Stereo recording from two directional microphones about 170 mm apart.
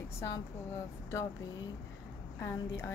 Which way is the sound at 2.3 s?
15° left (ahead or behind).